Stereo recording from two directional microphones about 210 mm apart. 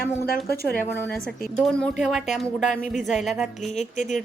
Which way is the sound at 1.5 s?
5° left (ahead or behind).